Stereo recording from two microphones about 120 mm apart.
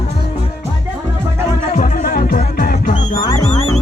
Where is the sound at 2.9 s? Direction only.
45° left (ahead or behind).